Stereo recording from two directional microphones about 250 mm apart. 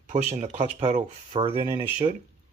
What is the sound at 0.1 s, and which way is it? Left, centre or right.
Speech, right.